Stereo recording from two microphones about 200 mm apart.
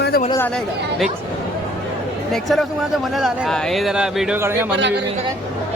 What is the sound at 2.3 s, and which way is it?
A man's voice, centre (ahead or behind).